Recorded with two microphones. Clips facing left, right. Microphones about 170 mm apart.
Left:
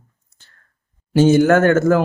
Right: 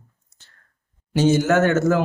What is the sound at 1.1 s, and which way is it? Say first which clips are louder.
Speech: left 5 dB; 55° left (ahead or behind).